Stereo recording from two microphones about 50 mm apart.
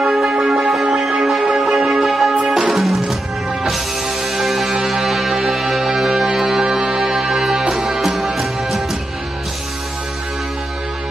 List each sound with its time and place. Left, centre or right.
0.0 s music: centre